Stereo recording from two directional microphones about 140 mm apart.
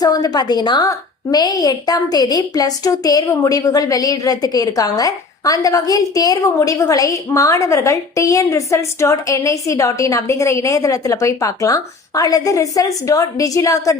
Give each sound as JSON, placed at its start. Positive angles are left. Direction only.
{"t": 0.0, "sound": "a woman's voice", "side_deg": 25}